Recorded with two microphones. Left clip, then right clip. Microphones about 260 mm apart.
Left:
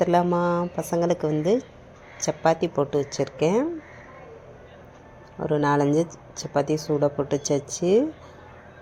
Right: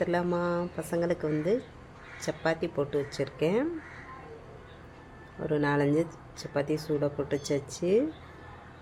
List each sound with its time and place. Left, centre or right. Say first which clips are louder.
0.0 s speech: left 8 dB; centre
5.4 s speech: left 6 dB; centre